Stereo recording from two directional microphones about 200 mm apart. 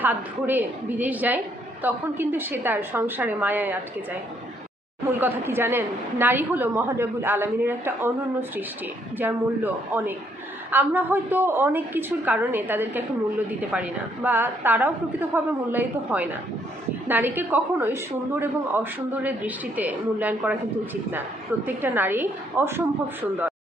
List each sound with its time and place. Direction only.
0.0 s a woman's voice: 10° right (ahead or behind)
5.2 s a woman's voice: 10° right (ahead or behind)